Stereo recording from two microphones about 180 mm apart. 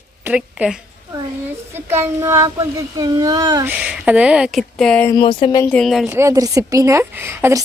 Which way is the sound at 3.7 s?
5° right (ahead or behind).